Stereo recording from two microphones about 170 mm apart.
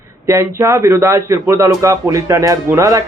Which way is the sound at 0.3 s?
15° right (ahead or behind).